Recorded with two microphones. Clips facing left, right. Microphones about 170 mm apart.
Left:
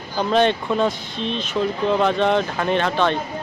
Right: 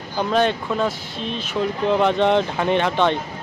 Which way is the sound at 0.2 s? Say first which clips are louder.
Left 1 dB; 5° right (ahead or behind).